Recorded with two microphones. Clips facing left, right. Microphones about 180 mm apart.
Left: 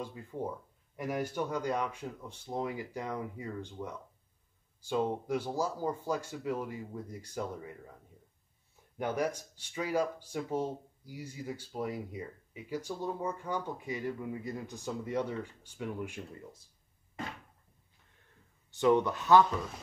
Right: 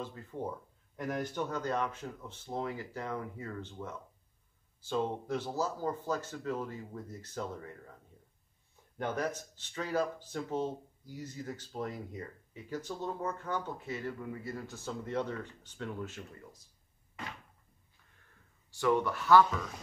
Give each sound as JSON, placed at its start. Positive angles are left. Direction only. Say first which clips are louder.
{"t": 0.0, "sound": "speech", "louder": "left 1 dB", "side_deg": 10}
{"t": 18.7, "sound": "speech", "louder": "left 3 dB", "side_deg": 20}